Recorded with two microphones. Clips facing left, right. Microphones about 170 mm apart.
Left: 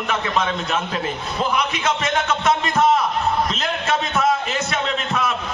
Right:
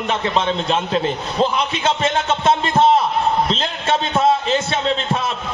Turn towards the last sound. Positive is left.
turn(degrees=-30)  # may be behind; listen again after turning